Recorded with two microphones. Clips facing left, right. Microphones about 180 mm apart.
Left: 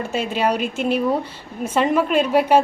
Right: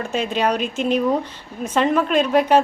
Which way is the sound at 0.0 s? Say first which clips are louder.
Even; 10° left (ahead or behind).